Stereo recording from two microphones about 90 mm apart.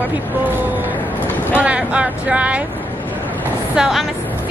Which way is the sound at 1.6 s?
10° right (ahead or behind).